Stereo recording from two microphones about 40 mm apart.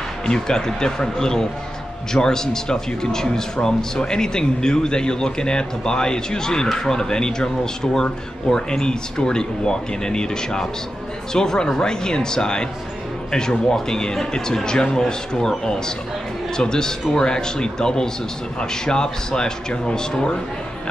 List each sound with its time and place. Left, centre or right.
0.3 s speech: centre